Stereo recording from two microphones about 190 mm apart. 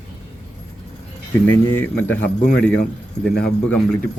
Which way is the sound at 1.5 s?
10° left (ahead or behind).